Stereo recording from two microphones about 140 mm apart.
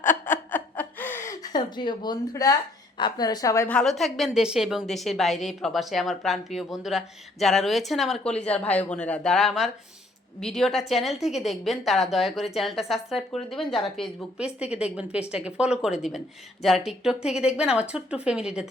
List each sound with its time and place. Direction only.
0.3 s chuckle: 15° left (ahead or behind)
3.0 s a woman's voice: 30° left (ahead or behind)
3.7 s a woman's voice: 5° left (ahead or behind)